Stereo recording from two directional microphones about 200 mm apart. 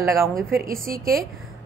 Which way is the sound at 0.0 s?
15° right (ahead or behind).